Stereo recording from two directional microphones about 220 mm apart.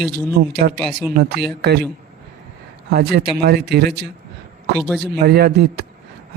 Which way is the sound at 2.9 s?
45° right (ahead or behind).